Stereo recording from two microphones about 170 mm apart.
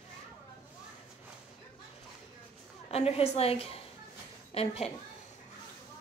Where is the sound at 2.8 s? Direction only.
35° left (ahead or behind).